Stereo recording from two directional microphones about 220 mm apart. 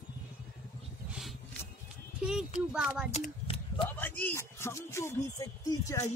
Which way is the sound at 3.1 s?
25° left (ahead or behind).